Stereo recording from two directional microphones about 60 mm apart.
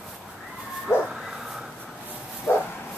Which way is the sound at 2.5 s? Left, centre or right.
Left.